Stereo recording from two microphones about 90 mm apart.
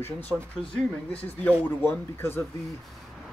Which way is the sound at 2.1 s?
25° left (ahead or behind).